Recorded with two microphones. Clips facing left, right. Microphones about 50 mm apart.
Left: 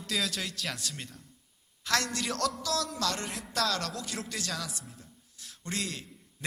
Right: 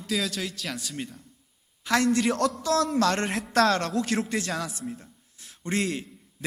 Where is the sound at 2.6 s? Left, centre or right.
Right.